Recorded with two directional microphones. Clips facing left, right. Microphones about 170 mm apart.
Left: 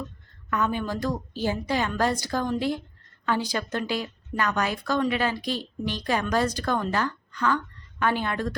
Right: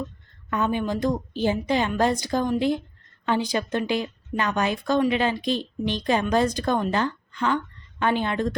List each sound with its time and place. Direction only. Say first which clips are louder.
0.5 s a woman's voice: right 2 dB; 20° right (ahead or behind)